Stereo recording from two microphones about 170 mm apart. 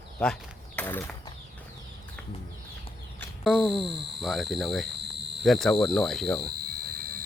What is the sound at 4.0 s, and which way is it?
Speech, 90° right.